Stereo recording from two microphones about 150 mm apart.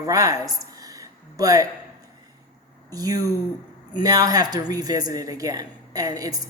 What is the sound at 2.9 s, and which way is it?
Speech, 25° right (ahead or behind).